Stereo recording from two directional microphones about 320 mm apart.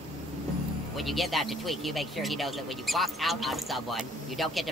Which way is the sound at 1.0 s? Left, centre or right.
Centre.